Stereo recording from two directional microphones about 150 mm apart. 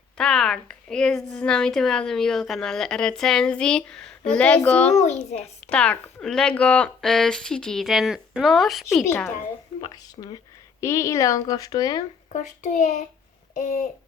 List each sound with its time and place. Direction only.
0.2 s a woman's voice: 5° left (ahead or behind)
4.9 s a child's voice: 50° left (ahead or behind)
5.6 s a woman's voice: 10° left (ahead or behind)
9.8 s speech: 30° left (ahead or behind)
12.3 s a child's voice: 55° left (ahead or behind)
13.5 s a sound: 50° left (ahead or behind)